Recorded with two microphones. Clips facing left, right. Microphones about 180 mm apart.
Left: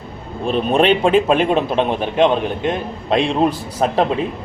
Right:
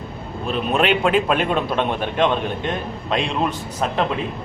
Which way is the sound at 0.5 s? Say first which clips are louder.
Left 4 dB; 30° left (ahead or behind).